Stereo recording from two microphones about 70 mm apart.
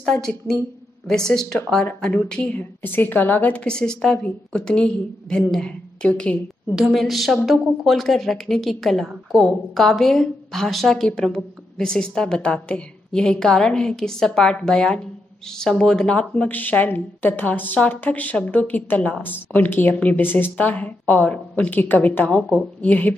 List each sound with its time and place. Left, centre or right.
0.0 s a woman's voice: centre
2.8 s a woman's voice: left
3.6 s a woman's voice: centre
6.7 s a woman's voice: centre
16.3 s a woman's voice: left